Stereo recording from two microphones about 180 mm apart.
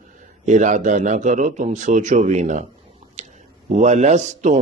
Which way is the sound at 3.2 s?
40° right (ahead or behind).